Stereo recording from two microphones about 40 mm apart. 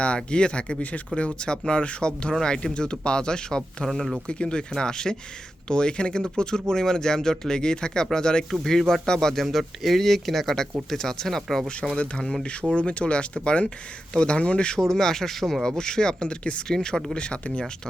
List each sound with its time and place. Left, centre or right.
0.3 s speech: left
0.8 s speech: left; by 3.8 s centre
3.8 s speech: centre
4.3 s speech: left
9.4 s speech: centre
11.9 s speech: left